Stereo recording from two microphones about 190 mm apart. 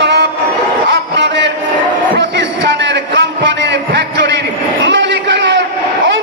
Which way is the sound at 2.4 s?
65° right (ahead or behind).